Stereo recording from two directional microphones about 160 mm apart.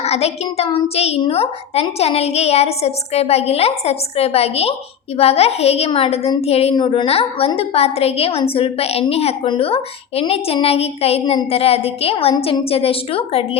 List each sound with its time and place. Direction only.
0.0 s a woman's voice: 40° left (ahead or behind)